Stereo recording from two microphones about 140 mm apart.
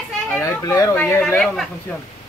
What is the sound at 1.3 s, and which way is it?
Speech, 5° left (ahead or behind).